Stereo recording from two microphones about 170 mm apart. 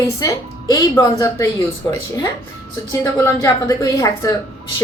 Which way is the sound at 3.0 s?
20° left (ahead or behind).